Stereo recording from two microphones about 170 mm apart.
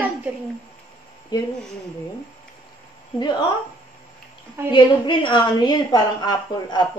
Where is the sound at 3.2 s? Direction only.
25° left (ahead or behind).